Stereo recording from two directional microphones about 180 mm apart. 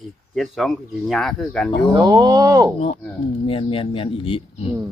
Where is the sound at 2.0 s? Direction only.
20° right (ahead or behind).